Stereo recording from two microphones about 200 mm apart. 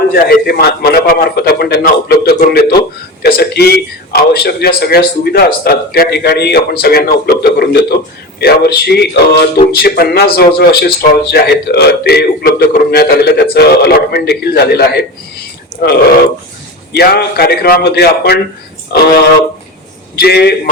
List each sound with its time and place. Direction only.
0.1 s speech: 50° left (ahead or behind)
16.9 s speech: 55° left (ahead or behind)